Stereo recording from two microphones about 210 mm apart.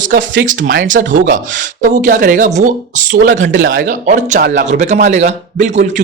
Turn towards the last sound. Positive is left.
turn(degrees=-35)  # may be behind; listen again after turning